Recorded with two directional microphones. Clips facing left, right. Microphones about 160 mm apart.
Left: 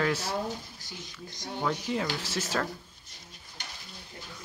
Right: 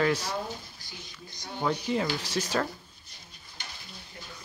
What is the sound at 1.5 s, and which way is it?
A man's voice, centre (ahead or behind).